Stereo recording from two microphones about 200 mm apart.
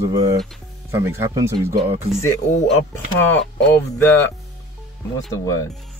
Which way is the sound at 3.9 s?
10° left (ahead or behind).